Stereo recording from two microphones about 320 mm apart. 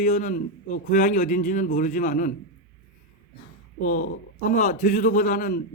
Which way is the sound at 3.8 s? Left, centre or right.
Left.